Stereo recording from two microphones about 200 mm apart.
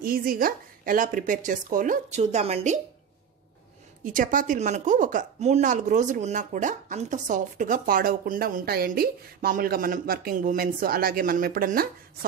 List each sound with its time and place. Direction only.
0.0 s speech: 45° right (ahead or behind)
4.0 s a woman's voice: 40° right (ahead or behind)